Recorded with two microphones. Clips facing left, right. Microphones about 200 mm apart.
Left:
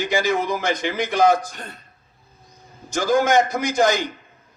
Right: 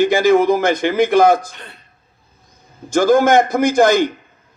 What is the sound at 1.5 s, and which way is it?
Speech, 45° left (ahead or behind).